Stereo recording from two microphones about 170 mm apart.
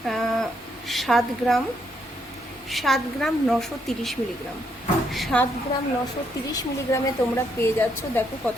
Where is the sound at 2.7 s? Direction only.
Centre (ahead or behind).